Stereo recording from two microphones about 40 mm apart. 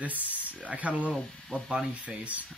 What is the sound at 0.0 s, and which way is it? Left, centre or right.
Speech, right.